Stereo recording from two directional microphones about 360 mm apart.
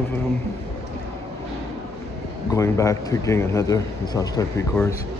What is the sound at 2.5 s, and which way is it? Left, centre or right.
A man's voice, centre.